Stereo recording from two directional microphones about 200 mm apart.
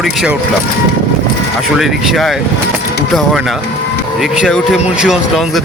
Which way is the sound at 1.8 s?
Centre (ahead or behind).